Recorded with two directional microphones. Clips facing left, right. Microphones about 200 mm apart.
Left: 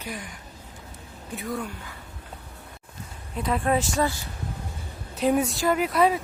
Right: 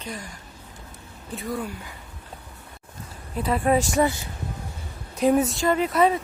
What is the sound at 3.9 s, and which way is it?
Speech, 20° right (ahead or behind).